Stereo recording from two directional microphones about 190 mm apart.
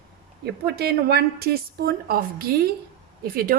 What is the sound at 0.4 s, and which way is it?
A woman's voice, 55° right (ahead or behind).